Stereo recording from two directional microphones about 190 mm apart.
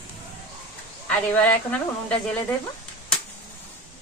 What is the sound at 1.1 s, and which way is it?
Speech, 5° left (ahead or behind).